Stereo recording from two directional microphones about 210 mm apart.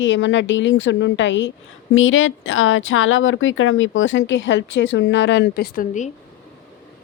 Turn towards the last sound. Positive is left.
turn(degrees=40)  # may be behind; listen again after turning